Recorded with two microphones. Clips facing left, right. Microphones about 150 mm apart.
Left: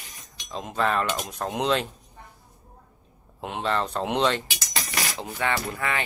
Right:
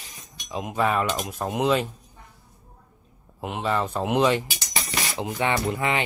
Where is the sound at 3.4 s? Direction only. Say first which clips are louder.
Right 1 dB; 5° right (ahead or behind).